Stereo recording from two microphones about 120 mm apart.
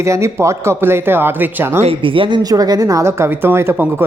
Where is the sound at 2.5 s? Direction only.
30° right (ahead or behind).